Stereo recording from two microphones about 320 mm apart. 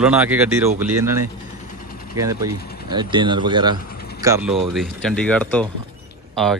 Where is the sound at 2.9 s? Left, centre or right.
Centre.